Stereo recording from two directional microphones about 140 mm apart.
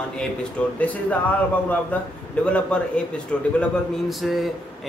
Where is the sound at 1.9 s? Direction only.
10° left (ahead or behind).